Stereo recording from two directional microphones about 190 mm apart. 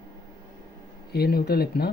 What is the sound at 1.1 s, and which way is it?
Speech, 55° left (ahead or behind).